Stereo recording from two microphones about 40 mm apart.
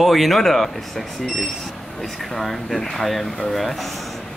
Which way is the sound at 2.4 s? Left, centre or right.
Centre.